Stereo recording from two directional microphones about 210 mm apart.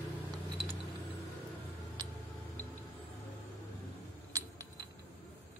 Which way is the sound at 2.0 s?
20° right (ahead or behind).